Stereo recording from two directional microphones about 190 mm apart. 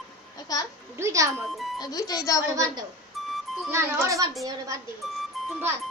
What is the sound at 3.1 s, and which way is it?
Music, centre (ahead or behind).